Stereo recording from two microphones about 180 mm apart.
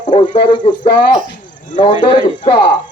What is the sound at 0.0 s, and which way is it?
Speech, 30° left (ahead or behind).